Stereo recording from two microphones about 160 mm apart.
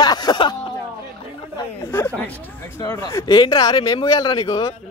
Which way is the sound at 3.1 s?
30° left (ahead or behind).